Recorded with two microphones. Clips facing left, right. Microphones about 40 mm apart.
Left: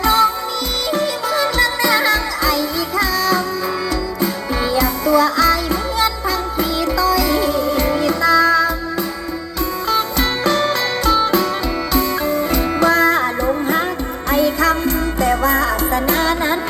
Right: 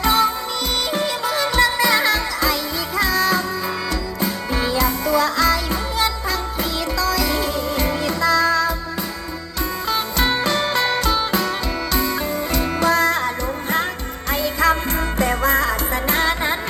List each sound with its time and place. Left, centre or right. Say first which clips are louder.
0.0 s music: left 3 dB; centre
9.9 s music: left 2 dB; centre
14.3 s music: left 4 dB; centre
14.8 s music: left 4 dB; right
15.5 s music: left 3 dB; centre